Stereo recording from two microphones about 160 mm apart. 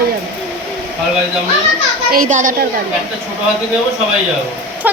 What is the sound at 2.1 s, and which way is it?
Speech, 55° right (ahead or behind).